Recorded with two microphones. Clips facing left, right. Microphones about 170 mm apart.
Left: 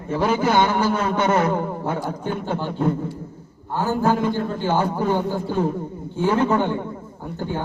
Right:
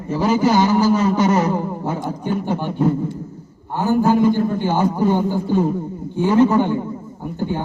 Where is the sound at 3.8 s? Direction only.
15° right (ahead or behind).